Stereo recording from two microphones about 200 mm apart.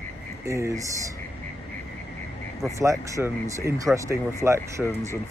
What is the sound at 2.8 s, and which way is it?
Speech, 15° right (ahead or behind).